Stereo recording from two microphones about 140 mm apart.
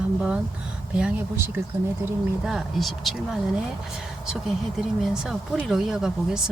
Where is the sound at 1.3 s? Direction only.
15° right (ahead or behind).